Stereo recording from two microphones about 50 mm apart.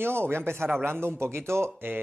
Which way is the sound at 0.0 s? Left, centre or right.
Right.